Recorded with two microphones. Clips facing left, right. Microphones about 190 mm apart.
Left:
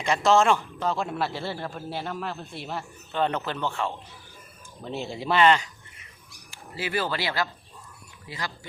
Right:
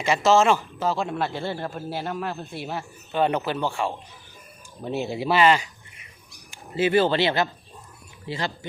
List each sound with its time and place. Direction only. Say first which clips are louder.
0.0 s a man's voice: right 2 dB; 5° right (ahead or behind)
6.5 s speech: right 10 dB; 20° right (ahead or behind)